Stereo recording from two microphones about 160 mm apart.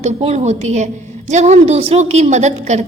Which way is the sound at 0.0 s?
40° right (ahead or behind).